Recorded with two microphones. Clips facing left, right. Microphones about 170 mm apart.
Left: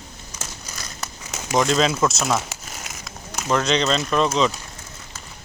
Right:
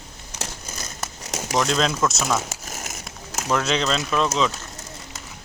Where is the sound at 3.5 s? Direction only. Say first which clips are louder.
Left 2 dB; 5° right (ahead or behind).